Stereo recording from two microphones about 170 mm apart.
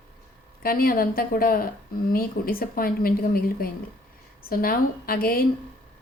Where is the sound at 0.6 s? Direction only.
60° left (ahead or behind).